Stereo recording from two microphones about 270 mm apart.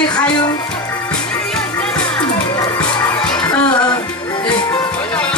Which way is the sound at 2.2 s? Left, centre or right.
Centre.